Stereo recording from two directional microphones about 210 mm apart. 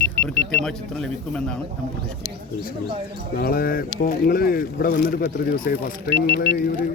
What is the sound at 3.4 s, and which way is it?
Speech, 45° left (ahead or behind).